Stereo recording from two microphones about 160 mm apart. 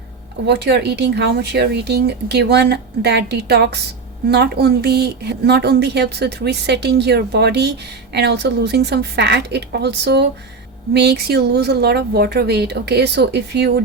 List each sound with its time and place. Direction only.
0.4 s a woman's voice: 90° right